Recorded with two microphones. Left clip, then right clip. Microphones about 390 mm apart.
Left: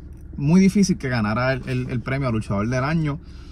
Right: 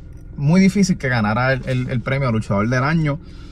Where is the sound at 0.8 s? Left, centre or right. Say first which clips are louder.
Right 4 dB; centre.